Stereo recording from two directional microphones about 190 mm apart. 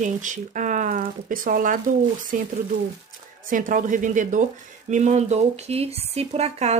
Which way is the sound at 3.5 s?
45° right (ahead or behind).